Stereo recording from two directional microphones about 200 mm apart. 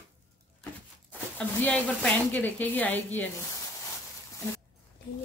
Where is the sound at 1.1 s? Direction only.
10° left (ahead or behind).